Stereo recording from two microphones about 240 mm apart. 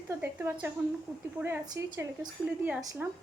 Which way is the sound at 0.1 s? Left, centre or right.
Centre.